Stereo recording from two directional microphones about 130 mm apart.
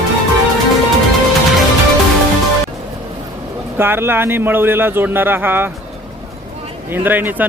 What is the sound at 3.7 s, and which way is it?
A man's voice, 15° right (ahead or behind).